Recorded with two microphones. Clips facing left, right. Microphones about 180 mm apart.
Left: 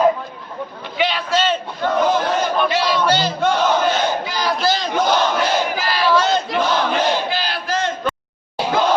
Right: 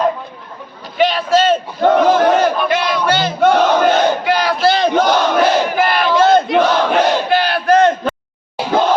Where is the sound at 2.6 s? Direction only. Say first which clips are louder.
Right 2 dB; 55° right (ahead or behind).